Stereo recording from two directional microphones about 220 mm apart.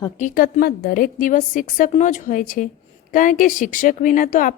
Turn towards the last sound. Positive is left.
turn(degrees=35)  # may be behind; listen again after turning